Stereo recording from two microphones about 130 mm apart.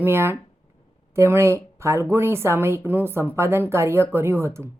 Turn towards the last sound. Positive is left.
turn(degrees=-20)  # may be behind; listen again after turning